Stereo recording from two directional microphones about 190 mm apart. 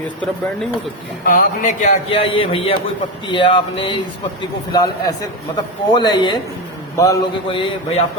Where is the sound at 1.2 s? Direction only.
45° left (ahead or behind).